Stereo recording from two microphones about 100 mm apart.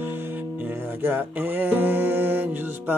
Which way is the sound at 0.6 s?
20° right (ahead or behind).